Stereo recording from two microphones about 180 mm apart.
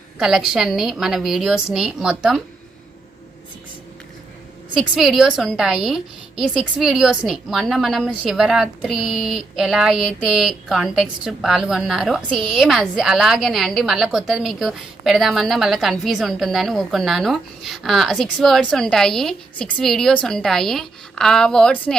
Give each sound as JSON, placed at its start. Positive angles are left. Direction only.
{"t": 0.2, "sound": "a woman's voice", "side_deg": 0}
{"t": 4.8, "sound": "a woman's voice", "side_deg": 0}